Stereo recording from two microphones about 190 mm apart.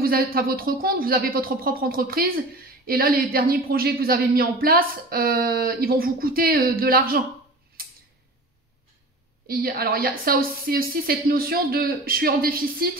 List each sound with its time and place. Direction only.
0.0 s speech: 50° right (ahead or behind)
7.8 s tick-tock: 50° right (ahead or behind)
9.5 s speech: 50° right (ahead or behind)